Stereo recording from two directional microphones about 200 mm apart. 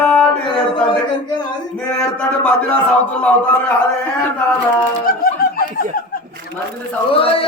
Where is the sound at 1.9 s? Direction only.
5° left (ahead or behind).